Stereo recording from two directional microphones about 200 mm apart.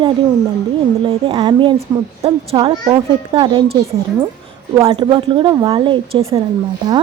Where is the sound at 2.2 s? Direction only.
30° right (ahead or behind).